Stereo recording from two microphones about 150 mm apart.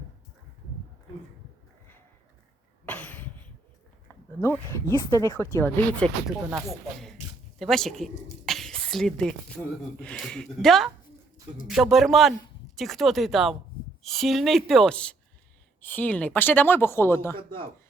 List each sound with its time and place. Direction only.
2.8 s a sound: 10° left (ahead or behind)
4.1 s speech: 15° left (ahead or behind)
6.2 s a woman's voice: centre (ahead or behind); by 17.4 s 15° left (ahead or behind)